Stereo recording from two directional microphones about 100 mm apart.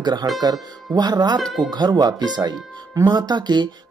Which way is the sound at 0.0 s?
45° right (ahead or behind).